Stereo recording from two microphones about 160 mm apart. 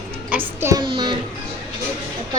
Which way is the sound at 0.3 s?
15° right (ahead or behind).